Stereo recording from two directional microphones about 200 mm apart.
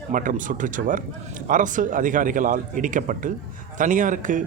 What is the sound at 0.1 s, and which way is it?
Speech, 40° right (ahead or behind).